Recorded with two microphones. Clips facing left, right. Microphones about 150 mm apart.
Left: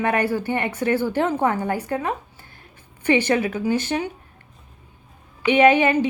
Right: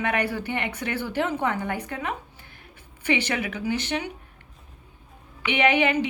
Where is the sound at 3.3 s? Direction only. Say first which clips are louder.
Left 7 dB; 40° left (ahead or behind).